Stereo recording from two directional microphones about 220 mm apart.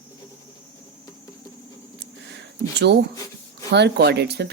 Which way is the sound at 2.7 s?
50° right (ahead or behind).